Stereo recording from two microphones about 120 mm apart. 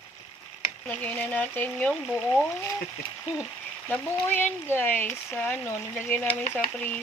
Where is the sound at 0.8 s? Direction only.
10° left (ahead or behind).